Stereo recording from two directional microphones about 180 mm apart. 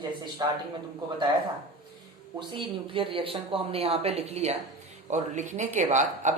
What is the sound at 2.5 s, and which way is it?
Speech, 30° right (ahead or behind).